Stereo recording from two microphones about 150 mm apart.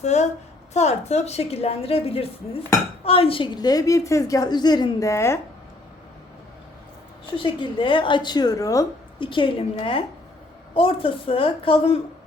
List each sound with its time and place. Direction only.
0.0 s a woman's voice: 50° left (ahead or behind); by 5.4 s 20° left (ahead or behind)
7.3 s a woman's voice: 35° left (ahead or behind)
9.1 s a woman's voice: 35° left (ahead or behind)